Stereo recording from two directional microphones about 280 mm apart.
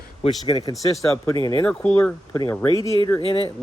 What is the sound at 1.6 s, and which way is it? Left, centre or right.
Speech, centre.